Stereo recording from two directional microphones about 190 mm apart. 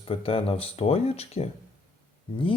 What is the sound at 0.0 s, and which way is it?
Speech, 30° left (ahead or behind).